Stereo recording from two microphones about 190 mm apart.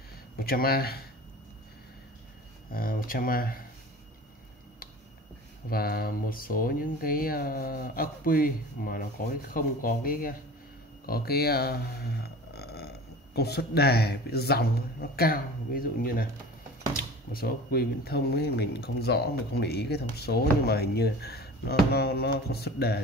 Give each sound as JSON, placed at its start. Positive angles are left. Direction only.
{"t": 0.4, "sound": "speech", "side_deg": 50}
{"t": 2.7, "sound": "speech", "side_deg": 50}
{"t": 5.7, "sound": "speech", "side_deg": 50}
{"t": 17.3, "sound": "speech", "side_deg": 50}